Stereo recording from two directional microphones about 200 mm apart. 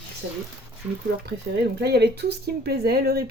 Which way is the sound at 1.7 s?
55° right (ahead or behind).